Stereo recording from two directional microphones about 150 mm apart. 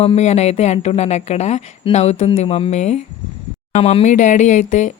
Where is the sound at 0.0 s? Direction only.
45° left (ahead or behind).